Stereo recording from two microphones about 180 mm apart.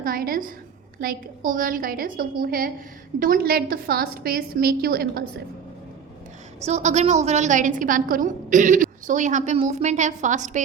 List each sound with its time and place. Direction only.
0.0 s a woman's voice: 55° right (ahead or behind)
6.7 s a woman's voice: 40° right (ahead or behind)